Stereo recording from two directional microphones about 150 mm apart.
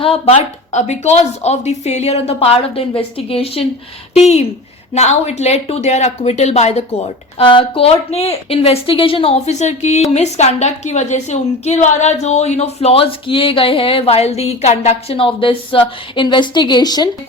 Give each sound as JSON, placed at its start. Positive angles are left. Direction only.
{"t": 0.0, "sound": "speech", "side_deg": 40}
{"t": 4.9, "sound": "a woman's voice", "side_deg": 45}